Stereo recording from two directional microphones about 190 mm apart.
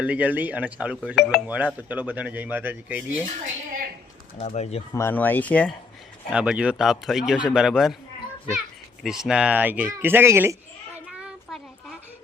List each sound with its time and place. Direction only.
0.0 s speech: 10° right (ahead or behind)
4.4 s speech: 35° left (ahead or behind)
4.9 s speech: 10° left (ahead or behind)
6.3 s a man's voice: 5° right (ahead or behind)
9.0 s speech: 5° right (ahead or behind)